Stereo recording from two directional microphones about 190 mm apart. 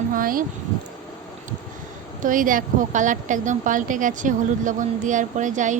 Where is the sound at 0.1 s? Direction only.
45° right (ahead or behind).